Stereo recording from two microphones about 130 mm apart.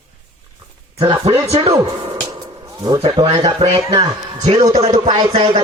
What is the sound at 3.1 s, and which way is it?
Speech, 50° right (ahead or behind).